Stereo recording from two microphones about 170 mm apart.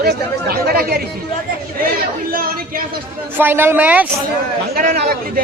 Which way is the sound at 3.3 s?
15° right (ahead or behind).